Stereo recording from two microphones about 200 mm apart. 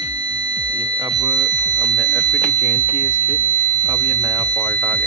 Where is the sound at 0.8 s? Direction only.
20° right (ahead or behind).